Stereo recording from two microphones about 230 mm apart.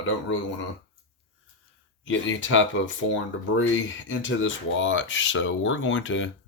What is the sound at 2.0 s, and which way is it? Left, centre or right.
Speech, left.